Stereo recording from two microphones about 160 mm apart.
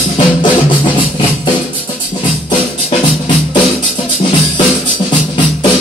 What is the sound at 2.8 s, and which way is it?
Music, 30° left (ahead or behind).